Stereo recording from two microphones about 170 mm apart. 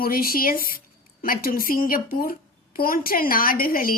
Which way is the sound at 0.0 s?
60° left (ahead or behind).